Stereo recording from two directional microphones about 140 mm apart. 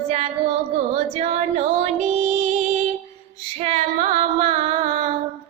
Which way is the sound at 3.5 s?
50° right (ahead or behind).